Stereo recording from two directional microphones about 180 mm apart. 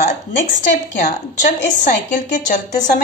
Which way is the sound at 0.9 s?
45° left (ahead or behind).